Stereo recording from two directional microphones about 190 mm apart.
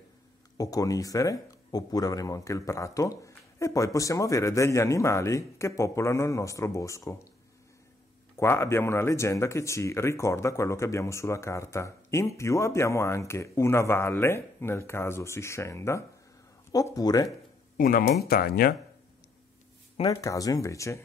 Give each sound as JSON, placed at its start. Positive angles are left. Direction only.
{"t": 0.6, "sound": "speech", "side_deg": 20}
{"t": 8.4, "sound": "speech", "side_deg": 15}
{"t": 17.7, "sound": "speech", "side_deg": 50}
{"t": 20.1, "sound": "speech", "side_deg": 15}